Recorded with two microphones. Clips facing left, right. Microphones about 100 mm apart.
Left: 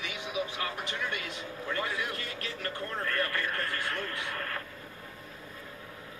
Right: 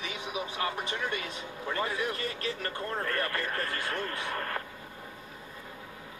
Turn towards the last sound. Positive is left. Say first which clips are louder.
# right 2 dB
turn(degrees=-30)  # may be behind; listen again after turning